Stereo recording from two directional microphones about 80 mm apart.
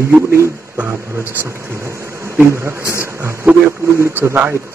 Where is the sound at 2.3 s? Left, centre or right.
Right.